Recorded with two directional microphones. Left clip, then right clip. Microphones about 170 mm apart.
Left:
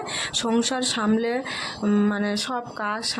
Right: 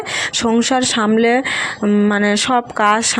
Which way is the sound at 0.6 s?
30° right (ahead or behind).